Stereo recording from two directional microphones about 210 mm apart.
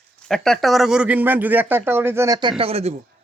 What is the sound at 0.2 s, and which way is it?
A man's voice, 5° left (ahead or behind).